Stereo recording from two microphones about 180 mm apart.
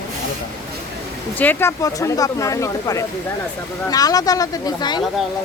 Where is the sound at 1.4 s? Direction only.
10° left (ahead or behind).